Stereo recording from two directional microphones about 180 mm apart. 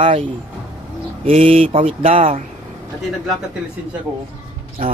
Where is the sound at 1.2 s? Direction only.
35° right (ahead or behind).